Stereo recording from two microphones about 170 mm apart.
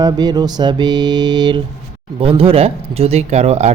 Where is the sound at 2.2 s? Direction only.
35° right (ahead or behind).